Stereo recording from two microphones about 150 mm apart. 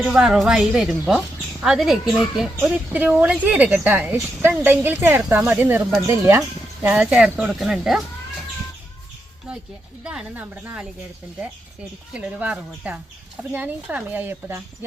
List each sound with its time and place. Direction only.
0.0 s a woman's voice: 5° right (ahead or behind)
10.0 s speech: 5° right (ahead or behind)